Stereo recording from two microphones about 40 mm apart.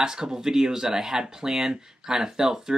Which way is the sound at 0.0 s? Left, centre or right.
Centre.